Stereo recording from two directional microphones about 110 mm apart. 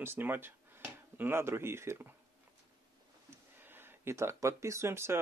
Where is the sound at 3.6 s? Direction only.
20° right (ahead or behind).